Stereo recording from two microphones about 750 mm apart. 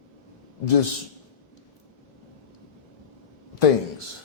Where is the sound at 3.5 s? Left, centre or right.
Left.